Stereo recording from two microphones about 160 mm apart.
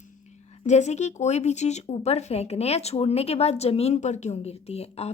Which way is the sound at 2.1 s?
40° left (ahead or behind).